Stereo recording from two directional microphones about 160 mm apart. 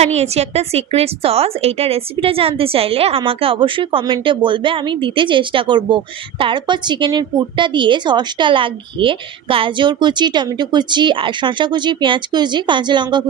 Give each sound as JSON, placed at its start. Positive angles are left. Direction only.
{"t": 0.0, "sound": "a woman's voice", "side_deg": -45}